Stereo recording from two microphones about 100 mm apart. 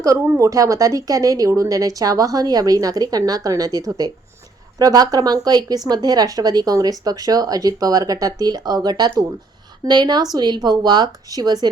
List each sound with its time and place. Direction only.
0.0 s a woman's voice: 35° right (ahead or behind)